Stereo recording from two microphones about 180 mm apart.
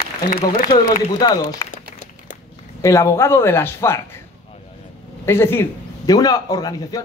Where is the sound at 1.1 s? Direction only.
20° left (ahead or behind).